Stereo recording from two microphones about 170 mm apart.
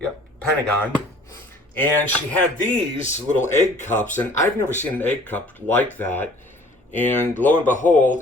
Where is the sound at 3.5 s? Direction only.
45° left (ahead or behind).